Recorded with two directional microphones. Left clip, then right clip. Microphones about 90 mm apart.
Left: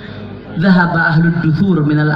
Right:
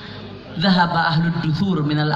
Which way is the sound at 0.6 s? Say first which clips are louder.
Left 4 dB; 30° left (ahead or behind).